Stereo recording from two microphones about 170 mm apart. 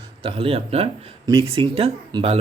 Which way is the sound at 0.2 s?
30° right (ahead or behind).